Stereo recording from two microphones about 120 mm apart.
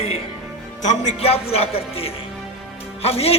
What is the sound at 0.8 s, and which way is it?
A man's voice, 75° left (ahead or behind).